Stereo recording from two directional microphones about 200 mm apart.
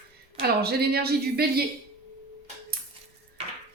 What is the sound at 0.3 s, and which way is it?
Speech, 50° right (ahead or behind).